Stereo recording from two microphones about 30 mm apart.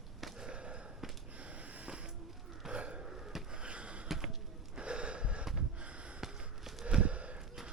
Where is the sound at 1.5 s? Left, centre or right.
Right.